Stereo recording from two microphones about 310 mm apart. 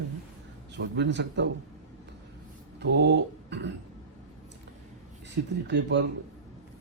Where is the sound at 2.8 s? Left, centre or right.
Right.